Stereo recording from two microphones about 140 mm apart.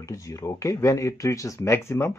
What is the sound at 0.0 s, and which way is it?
Speech, 20° left (ahead or behind).